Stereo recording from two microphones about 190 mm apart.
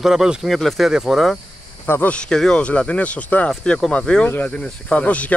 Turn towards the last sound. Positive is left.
turn(degrees=5)  # may be behind; listen again after turning